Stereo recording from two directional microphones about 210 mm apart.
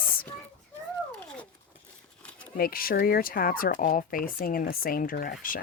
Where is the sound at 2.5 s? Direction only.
45° left (ahead or behind).